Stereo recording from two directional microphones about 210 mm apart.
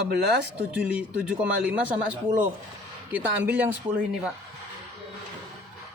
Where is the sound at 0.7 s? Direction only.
5° right (ahead or behind).